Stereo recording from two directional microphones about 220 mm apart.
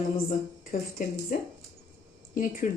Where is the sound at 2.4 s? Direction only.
35° left (ahead or behind).